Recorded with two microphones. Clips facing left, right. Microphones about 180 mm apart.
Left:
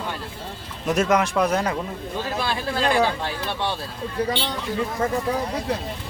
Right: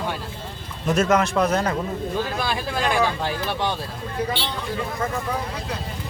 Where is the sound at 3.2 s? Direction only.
15° right (ahead or behind).